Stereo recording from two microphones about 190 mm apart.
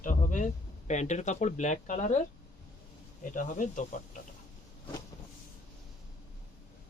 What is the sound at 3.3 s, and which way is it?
Speech, 45° left (ahead or behind).